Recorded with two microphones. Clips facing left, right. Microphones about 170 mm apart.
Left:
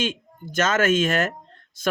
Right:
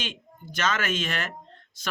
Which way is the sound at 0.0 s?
45° left (ahead or behind).